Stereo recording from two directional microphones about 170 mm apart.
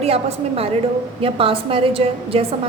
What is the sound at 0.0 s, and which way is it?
Speech, 35° right (ahead or behind).